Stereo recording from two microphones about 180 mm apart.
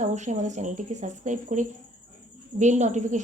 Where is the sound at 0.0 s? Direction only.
40° right (ahead or behind).